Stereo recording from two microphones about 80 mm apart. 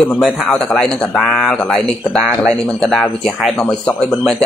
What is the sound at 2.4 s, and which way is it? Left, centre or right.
Speech, centre.